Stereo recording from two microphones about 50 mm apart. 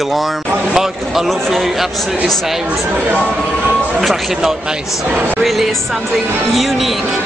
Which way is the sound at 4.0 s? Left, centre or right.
Centre.